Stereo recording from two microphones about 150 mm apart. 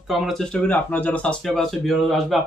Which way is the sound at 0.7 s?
10° left (ahead or behind).